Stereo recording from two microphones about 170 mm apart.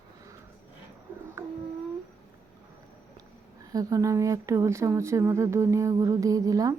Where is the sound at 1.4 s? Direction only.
15° right (ahead or behind).